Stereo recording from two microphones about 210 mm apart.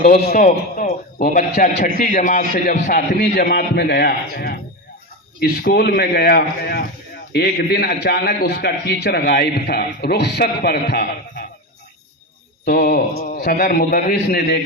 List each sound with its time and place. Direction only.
0.0 s a man's voice: 35° left (ahead or behind)
12.6 s a man's voice: 50° left (ahead or behind)